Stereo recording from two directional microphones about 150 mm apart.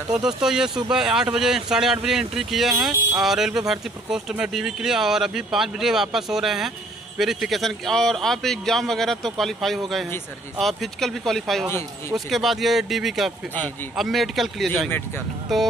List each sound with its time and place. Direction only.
0.4 s speech: 5° right (ahead or behind)
2.7 s speech: 20° right (ahead or behind)
3.2 s speech: 5° right (ahead or behind)
14.9 s speech: 15° left (ahead or behind)
15.5 s speech: centre (ahead or behind)